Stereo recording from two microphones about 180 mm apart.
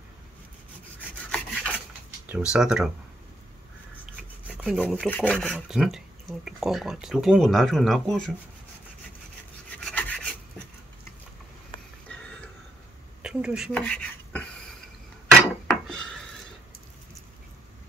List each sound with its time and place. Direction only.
1.3 s rub: 5° left (ahead or behind)
2.2 s speech: 5° right (ahead or behind)
4.7 s speech: 5° left (ahead or behind)
9.8 s filing: 5° left (ahead or behind)
12.1 s a sound: 5° left (ahead or behind)
13.2 s speech: 5° right (ahead or behind)
13.7 s dishes: 5° left (ahead or behind)